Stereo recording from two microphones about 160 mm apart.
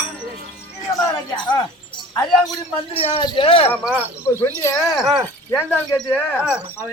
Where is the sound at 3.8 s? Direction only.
10° right (ahead or behind).